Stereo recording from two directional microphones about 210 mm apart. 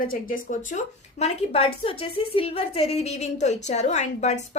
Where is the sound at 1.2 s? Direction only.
25° left (ahead or behind).